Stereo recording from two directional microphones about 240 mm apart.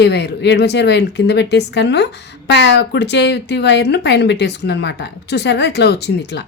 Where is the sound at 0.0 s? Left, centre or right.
Left.